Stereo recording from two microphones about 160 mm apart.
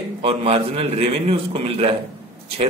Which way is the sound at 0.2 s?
40° right (ahead or behind).